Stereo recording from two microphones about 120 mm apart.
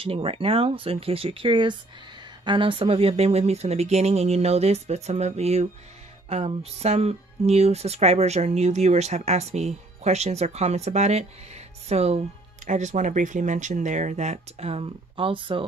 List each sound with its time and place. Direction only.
0.0 s speech: 50° right (ahead or behind)
12.6 s speech: 85° right; by 15.6 s 45° right (ahead or behind)